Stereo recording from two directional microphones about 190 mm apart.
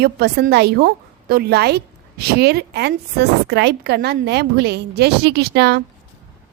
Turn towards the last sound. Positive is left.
turn(degrees=-60)  # may be behind; listen again after turning